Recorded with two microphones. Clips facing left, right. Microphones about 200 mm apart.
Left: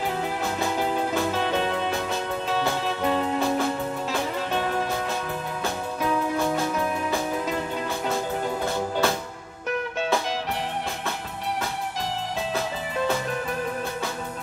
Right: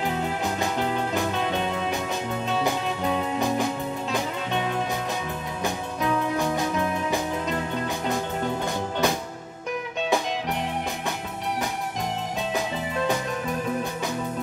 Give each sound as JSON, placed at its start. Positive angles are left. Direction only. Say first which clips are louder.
{"t": 1.3, "sound": "music", "louder": "left 1 dB", "side_deg": 0}
{"t": 9.0, "sound": "music", "louder": "right 2 dB", "side_deg": -15}